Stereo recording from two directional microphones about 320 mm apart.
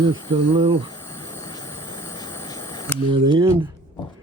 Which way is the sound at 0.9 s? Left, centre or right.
Centre.